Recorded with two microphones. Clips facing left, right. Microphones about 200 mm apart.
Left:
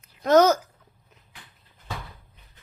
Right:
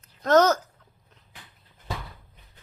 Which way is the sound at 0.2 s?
10° left (ahead or behind).